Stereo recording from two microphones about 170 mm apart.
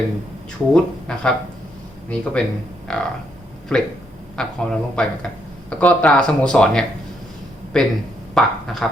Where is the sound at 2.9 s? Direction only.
5° left (ahead or behind).